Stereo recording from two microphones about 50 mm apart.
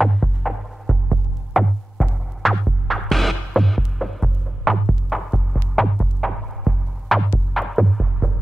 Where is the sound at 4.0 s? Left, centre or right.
Centre.